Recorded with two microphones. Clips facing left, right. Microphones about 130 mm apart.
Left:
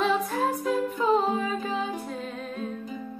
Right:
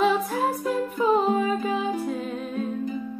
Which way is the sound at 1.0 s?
5° right (ahead or behind).